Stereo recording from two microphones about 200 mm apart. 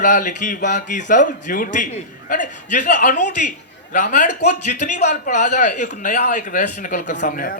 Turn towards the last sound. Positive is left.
turn(degrees=45)  # may be behind; listen again after turning